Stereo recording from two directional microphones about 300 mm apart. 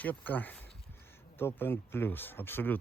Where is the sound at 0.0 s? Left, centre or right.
Centre.